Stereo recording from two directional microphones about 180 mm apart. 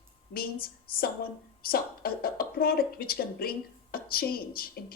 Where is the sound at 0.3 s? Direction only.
55° left (ahead or behind).